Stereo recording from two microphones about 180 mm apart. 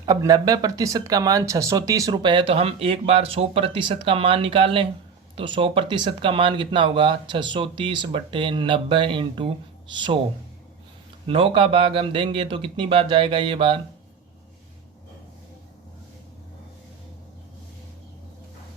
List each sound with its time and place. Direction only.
0.0 s speech: 20° right (ahead or behind)
11.3 s speech: 30° right (ahead or behind)